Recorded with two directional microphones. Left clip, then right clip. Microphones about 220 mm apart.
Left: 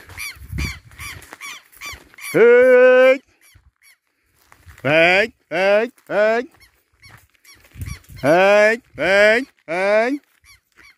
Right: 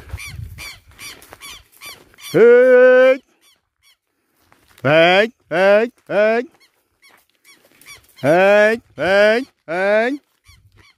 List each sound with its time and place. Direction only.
1.3 s squeak: 50° left (ahead or behind)
2.3 s fowl: 25° right (ahead or behind)
4.8 s speech: 25° right (ahead or behind)
8.2 s speech: 20° right (ahead or behind)
10.1 s dog: centre (ahead or behind)